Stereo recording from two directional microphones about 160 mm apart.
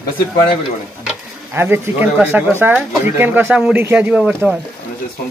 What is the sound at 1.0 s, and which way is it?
A man's voice, 15° right (ahead or behind).